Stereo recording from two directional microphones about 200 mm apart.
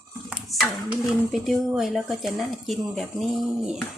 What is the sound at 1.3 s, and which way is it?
Speech, centre (ahead or behind).